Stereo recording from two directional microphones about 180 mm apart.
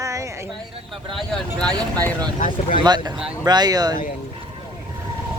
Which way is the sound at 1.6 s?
10° left (ahead or behind).